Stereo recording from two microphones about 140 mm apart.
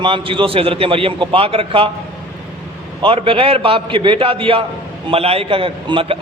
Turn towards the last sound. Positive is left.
turn(degrees=-40)  # may be behind; listen again after turning